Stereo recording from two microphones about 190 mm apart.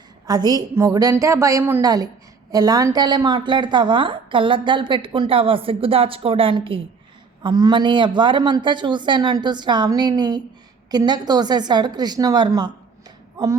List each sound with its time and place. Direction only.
0.3 s a woman's voice: 20° right (ahead or behind)